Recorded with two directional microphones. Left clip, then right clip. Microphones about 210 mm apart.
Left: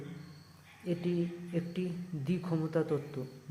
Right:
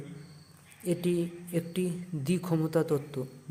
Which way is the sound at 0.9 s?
30° right (ahead or behind).